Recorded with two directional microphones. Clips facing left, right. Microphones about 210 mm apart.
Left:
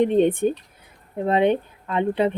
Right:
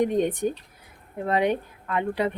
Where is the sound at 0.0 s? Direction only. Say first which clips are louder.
Left 5 dB; 25° left (ahead or behind).